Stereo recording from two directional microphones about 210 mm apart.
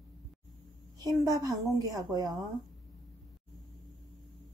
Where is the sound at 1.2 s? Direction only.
15° right (ahead or behind).